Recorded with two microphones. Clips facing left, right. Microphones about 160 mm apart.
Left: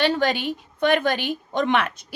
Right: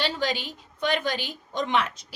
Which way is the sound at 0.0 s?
60° left (ahead or behind).